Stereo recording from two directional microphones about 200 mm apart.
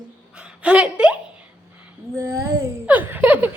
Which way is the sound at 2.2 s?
15° right (ahead or behind).